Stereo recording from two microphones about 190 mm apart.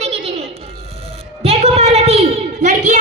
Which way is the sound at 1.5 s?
35° right (ahead or behind).